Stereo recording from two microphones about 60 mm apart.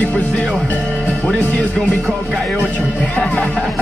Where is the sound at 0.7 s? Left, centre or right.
Centre.